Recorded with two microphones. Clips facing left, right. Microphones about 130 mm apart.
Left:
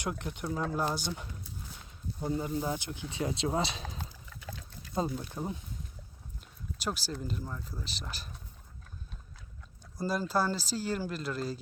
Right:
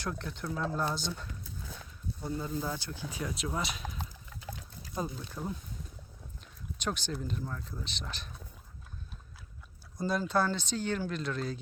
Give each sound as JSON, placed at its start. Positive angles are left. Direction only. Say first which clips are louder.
{"t": 0.0, "sound": "speech", "louder": "left 2 dB", "side_deg": 15}
{"t": 5.0, "sound": "speech", "louder": "left 4 dB", "side_deg": 25}
{"t": 6.7, "sound": "speech", "louder": "right 1 dB", "side_deg": 5}
{"t": 10.0, "sound": "speech", "louder": "right 1 dB", "side_deg": 5}